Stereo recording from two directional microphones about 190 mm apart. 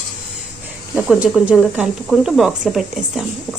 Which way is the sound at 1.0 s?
5° right (ahead or behind).